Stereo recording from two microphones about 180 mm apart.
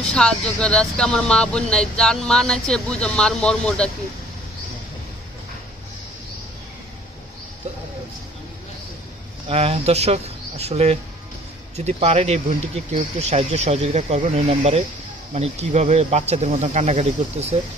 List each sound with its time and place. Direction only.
0.0 s speech: 5° left (ahead or behind)
9.5 s speech: 35° right (ahead or behind)